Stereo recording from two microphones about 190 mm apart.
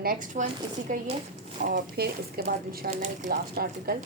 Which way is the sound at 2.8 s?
40° right (ahead or behind).